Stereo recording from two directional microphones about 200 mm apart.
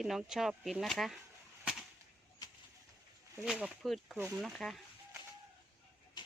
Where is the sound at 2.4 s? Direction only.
20° left (ahead or behind).